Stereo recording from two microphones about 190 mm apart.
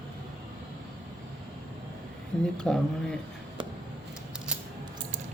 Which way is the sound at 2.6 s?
5° left (ahead or behind).